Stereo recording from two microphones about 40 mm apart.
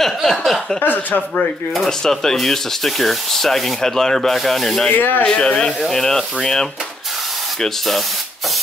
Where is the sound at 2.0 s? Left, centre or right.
Centre.